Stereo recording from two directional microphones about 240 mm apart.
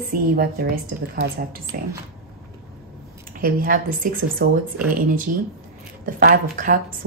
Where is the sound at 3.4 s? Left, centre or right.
Right.